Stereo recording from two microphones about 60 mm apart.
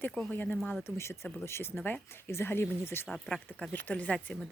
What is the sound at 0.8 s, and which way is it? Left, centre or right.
Speech, left.